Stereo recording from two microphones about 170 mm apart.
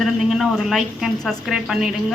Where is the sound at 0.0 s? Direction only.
Centre (ahead or behind).